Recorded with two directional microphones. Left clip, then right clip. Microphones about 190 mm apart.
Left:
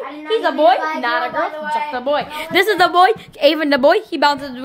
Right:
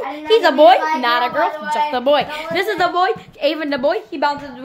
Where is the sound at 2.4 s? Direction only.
40° left (ahead or behind).